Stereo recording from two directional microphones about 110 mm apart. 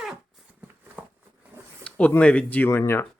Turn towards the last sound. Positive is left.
turn(degrees=20)  # may be behind; listen again after turning